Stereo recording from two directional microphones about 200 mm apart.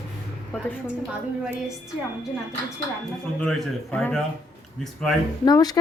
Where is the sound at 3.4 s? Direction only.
5° left (ahead or behind).